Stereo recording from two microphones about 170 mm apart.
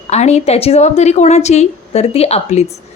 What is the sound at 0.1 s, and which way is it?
A woman's voice, 40° left (ahead or behind).